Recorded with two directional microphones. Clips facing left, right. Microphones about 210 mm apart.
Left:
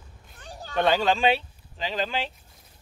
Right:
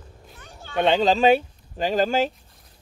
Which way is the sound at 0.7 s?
20° right (ahead or behind).